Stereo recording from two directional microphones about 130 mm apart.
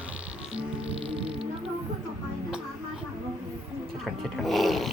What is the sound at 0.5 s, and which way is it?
Music, 45° right (ahead or behind).